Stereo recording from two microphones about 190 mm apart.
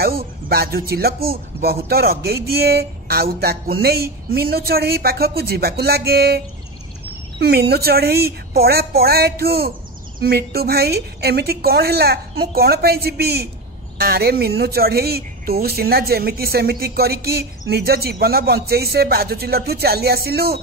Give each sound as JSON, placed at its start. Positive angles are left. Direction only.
{"t": 0.0, "sound": "speech", "side_deg": -55}